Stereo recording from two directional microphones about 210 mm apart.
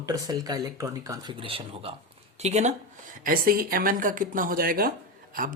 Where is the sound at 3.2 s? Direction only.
45° right (ahead or behind).